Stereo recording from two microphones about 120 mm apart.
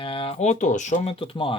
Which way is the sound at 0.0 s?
50° left (ahead or behind).